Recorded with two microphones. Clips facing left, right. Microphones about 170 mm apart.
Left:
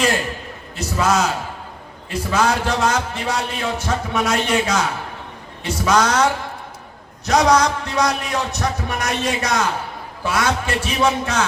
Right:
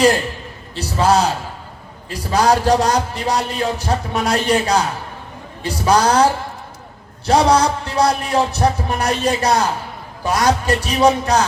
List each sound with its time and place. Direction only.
0.8 s a man's voice: 35° right (ahead or behind)